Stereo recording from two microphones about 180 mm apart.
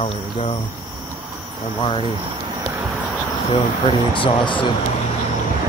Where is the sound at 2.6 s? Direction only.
15° right (ahead or behind).